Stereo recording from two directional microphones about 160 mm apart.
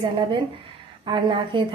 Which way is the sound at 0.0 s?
30° right (ahead or behind).